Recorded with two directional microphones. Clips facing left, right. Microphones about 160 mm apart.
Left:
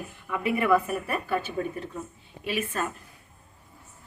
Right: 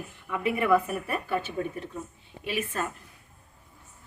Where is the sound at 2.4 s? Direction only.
20° right (ahead or behind).